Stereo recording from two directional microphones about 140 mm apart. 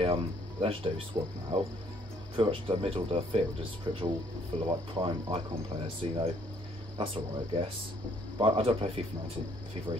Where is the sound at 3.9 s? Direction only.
30° right (ahead or behind).